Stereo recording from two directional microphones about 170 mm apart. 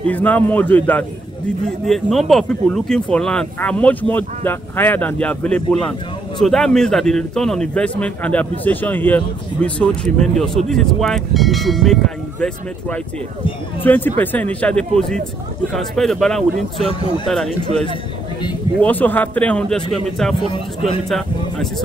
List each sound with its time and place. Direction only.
0.0 s a man's voice: 10° left (ahead or behind)
13.8 s a man's voice: 10° left (ahead or behind)
16.8 s speech: 30° left (ahead or behind)
17.3 s a man's voice: centre (ahead or behind)